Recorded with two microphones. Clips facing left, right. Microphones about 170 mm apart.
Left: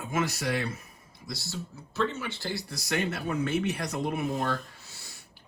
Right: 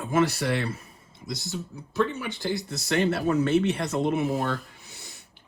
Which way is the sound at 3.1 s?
65° right (ahead or behind).